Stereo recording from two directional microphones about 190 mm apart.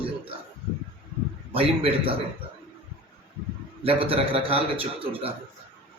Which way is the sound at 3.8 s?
30° right (ahead or behind).